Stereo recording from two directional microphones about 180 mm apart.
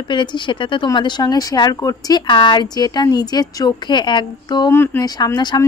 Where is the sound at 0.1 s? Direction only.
25° left (ahead or behind).